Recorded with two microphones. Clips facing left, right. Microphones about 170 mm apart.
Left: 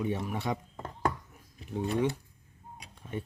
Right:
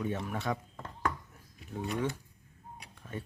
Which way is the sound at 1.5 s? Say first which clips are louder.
Left 4 dB; 35° left (ahead or behind).